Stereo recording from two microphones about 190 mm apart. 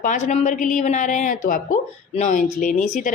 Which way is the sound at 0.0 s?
40° left (ahead or behind).